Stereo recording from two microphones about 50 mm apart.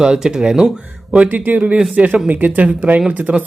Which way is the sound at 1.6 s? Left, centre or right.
Right.